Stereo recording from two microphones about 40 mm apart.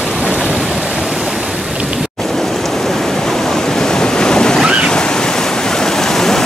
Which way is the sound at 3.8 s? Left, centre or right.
Centre.